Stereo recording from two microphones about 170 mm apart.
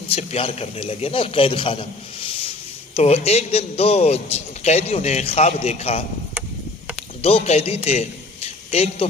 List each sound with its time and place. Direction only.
0.1 s a man's voice: 40° left (ahead or behind)
7.2 s a man's voice: 35° left (ahead or behind)
7.9 s a sound: 40° left (ahead or behind)